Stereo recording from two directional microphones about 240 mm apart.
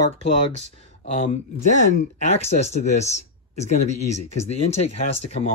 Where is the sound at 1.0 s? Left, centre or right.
Left.